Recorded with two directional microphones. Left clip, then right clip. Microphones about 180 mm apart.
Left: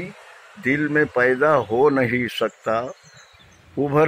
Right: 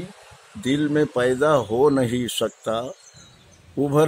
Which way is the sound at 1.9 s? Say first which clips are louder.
Left 2 dB; 15° right (ahead or behind).